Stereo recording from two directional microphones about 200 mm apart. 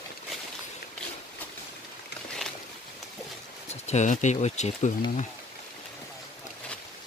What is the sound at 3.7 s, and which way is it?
Speech, 35° left (ahead or behind).